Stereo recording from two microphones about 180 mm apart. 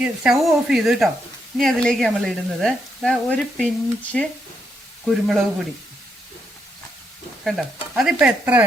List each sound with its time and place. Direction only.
0.0 s speech: 5° right (ahead or behind)
7.4 s speech: centre (ahead or behind)